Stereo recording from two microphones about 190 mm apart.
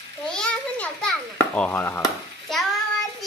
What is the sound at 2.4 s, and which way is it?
Child singing, centre (ahead or behind).